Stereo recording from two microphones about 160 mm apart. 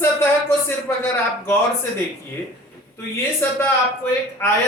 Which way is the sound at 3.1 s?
15° left (ahead or behind).